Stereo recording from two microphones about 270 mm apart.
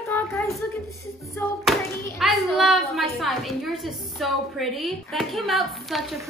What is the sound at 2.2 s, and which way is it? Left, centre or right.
A woman's voice, centre.